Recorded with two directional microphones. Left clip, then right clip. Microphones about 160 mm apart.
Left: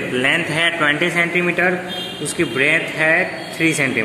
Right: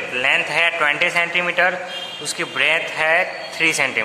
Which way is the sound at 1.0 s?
20° right (ahead or behind).